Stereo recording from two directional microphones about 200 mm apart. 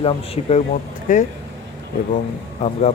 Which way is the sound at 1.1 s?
40° left (ahead or behind).